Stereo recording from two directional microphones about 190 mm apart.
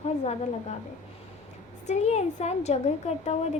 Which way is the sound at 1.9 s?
35° left (ahead or behind).